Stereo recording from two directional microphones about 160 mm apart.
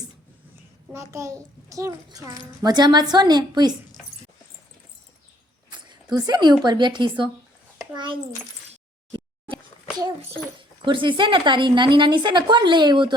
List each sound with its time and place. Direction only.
0.9 s a woman's voice: 20° right (ahead or behind)
6.1 s a woman's voice: 25° right (ahead or behind)
8.7 s a sound: 35° right (ahead or behind)
10.8 s a woman's voice: 30° right (ahead or behind)